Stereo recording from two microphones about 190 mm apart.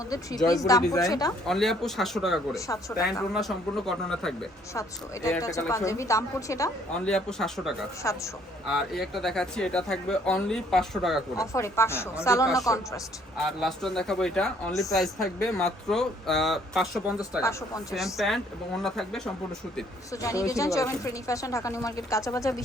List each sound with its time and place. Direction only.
0.1 s speech: 20° left (ahead or behind)
1.5 s speech: centre (ahead or behind)
4.7 s speech: 15° left (ahead or behind)
7.0 s speech: 5° left (ahead or behind)
8.0 s speech: 15° left (ahead or behind)
8.6 s speech: centre (ahead or behind)
11.3 s speech: 15° left (ahead or behind)
13.3 s speech: centre (ahead or behind)
20.2 s speech: 15° left (ahead or behind)